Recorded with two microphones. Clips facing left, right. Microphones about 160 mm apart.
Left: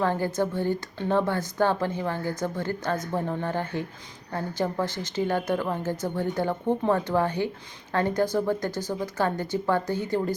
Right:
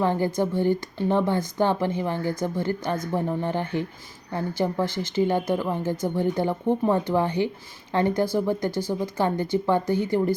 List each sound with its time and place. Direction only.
0.0 s a woman's voice: 15° right (ahead or behind)